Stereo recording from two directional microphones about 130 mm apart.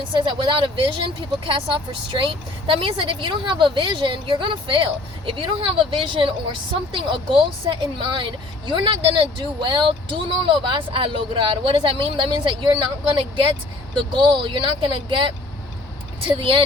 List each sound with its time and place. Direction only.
0.1 s a woman's voice: 40° right (ahead or behind)